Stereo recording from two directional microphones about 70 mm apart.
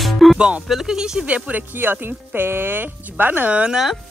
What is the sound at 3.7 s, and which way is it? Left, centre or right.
Speech, centre.